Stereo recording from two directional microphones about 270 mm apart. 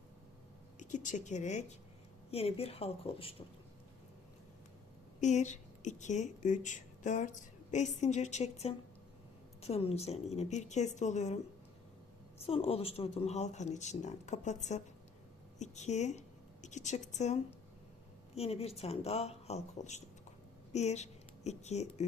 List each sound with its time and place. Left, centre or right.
0.8 s a woman's voice: left
5.2 s a woman's voice: left
12.4 s a woman's voice: left